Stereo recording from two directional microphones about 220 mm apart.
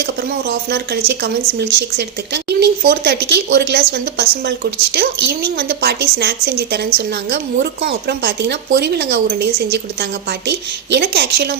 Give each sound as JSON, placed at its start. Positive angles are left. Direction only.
{"t": 0.0, "sound": "speech", "side_deg": -50}